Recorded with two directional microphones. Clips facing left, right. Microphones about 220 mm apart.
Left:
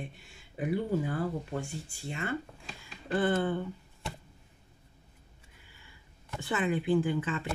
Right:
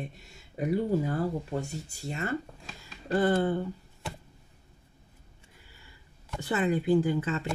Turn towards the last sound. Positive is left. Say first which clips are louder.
# right 3 dB
turn(degrees=-40)  # may be behind; listen again after turning